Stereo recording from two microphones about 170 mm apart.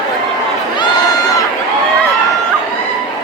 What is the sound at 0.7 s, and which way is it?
Crowd, 25° left (ahead or behind).